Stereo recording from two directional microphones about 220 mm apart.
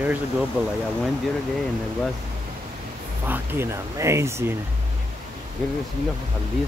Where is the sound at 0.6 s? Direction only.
5° right (ahead or behind).